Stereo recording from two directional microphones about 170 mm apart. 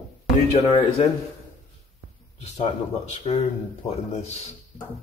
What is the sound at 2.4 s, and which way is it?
Speech, 40° left (ahead or behind).